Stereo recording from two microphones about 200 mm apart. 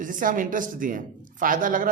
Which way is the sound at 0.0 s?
40° right (ahead or behind).